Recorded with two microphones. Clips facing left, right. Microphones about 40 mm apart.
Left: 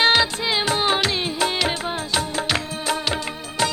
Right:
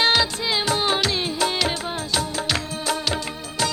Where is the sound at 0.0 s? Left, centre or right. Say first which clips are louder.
Left 2 dB; left.